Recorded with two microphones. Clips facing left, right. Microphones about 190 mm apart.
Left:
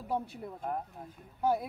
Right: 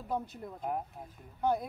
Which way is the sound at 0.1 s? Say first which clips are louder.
Left 1 dB; 10° left (ahead or behind).